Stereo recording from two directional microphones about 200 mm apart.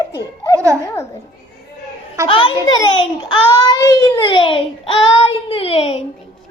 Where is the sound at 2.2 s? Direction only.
25° left (ahead or behind).